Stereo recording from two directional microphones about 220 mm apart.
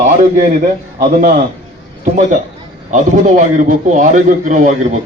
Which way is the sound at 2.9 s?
35° right (ahead or behind).